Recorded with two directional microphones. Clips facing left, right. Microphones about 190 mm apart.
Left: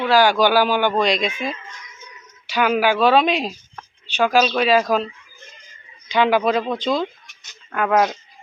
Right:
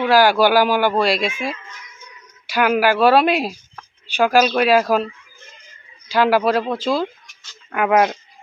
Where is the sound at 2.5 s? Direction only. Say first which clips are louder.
Right 1 dB; 10° right (ahead or behind).